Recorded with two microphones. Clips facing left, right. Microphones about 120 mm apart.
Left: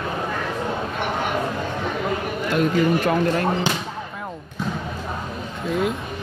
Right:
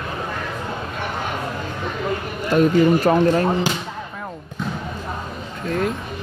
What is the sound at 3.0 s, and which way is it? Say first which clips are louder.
Speech: right 4 dB; 30° right (ahead or behind).